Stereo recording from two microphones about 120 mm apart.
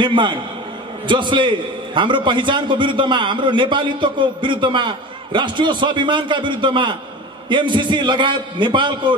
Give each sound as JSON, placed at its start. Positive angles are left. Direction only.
{"t": 0.0, "sound": "a man's voice", "side_deg": -40}